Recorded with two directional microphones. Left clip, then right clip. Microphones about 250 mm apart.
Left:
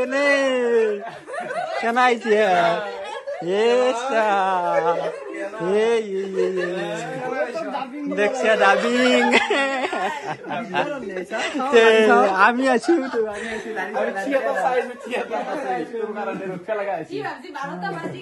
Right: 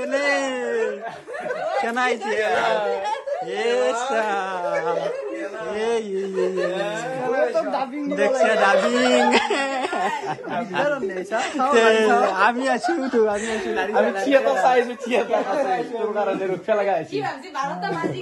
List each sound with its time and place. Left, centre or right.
0.0 s speech: centre
1.9 s a man's voice: centre
2.4 s speech: right
3.4 s a man's voice: centre
6.1 s speech: right
8.2 s speech: centre
14.3 s speech: right